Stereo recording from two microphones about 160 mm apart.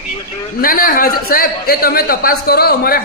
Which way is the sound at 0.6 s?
60° left (ahead or behind).